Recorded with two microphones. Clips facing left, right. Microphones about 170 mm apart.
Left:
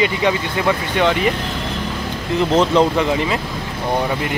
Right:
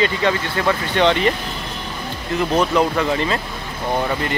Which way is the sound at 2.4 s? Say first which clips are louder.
Left 3 dB; 25° left (ahead or behind).